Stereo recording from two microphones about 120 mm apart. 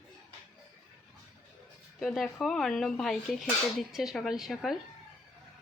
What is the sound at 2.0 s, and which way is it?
Speech, centre (ahead or behind).